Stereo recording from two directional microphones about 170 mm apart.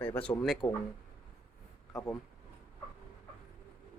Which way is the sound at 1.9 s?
Centre (ahead or behind).